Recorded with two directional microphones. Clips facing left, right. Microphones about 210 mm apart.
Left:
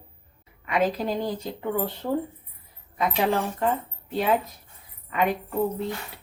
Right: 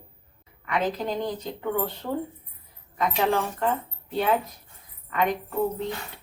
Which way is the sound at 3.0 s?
10° left (ahead or behind).